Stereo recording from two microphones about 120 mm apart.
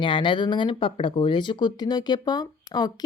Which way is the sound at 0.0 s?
45° left (ahead or behind).